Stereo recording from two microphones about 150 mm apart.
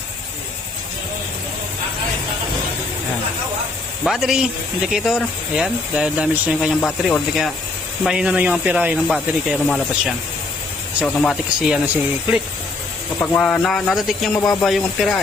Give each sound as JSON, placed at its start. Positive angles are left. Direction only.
{"t": 4.0, "sound": "speech", "side_deg": 0}
{"t": 9.0, "sound": "speech", "side_deg": 0}
{"t": 13.1, "sound": "speech", "side_deg": 10}
{"t": 14.3, "sound": "speech", "side_deg": 25}
{"t": 14.6, "sound": "speech", "side_deg": 0}